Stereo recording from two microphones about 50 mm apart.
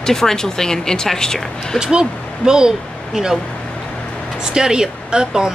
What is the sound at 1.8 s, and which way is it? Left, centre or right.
Speech, centre.